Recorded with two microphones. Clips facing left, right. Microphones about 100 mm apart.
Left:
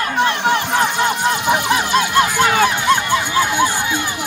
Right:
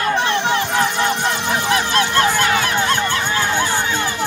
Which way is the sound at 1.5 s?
15° left (ahead or behind).